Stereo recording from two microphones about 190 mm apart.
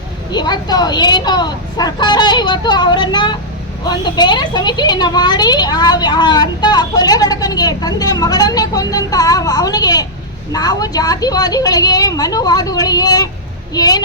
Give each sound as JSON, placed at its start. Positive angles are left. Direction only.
{"t": 0.3, "sound": "speech", "side_deg": 20}